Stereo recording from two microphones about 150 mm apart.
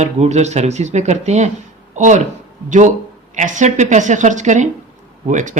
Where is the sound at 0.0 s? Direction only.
50° right (ahead or behind).